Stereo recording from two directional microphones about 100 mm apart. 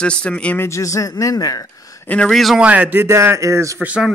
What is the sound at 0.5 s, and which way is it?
A man's voice, 30° left (ahead or behind).